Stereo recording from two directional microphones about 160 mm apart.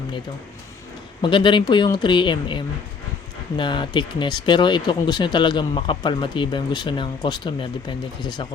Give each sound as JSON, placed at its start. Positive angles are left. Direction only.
{"t": 1.2, "sound": "speech", "side_deg": 30}